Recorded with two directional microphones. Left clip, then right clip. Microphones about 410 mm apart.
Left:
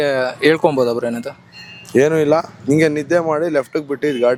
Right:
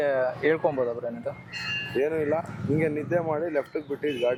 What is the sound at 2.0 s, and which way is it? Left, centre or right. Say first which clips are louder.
Speech: left 13 dB; left.